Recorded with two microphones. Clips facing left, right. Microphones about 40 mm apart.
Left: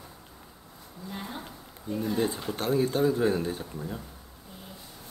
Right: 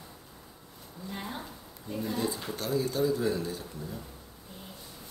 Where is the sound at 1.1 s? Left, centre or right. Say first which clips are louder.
Even; centre.